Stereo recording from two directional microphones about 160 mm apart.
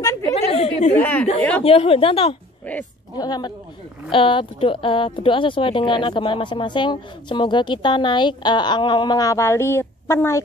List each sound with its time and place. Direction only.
0.5 s chatter: 40° left (ahead or behind)
0.9 s speech: 10° left (ahead or behind)
1.6 s speech: 40° left (ahead or behind)
2.7 s speech: 10° left (ahead or behind)
3.2 s speech: 25° left (ahead or behind)